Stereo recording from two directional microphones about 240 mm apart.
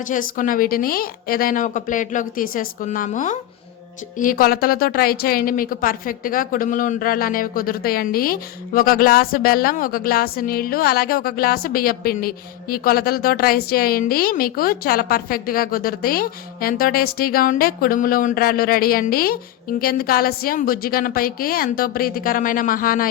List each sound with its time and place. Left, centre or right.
0.1 s a woman's voice: left